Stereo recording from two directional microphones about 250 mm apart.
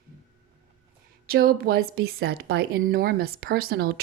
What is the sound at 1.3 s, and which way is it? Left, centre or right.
Speech, right.